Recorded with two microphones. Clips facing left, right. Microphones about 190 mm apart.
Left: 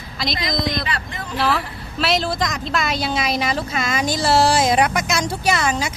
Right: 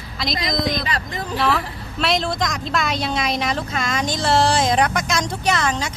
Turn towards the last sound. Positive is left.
turn(degrees=10)  # may be behind; listen again after turning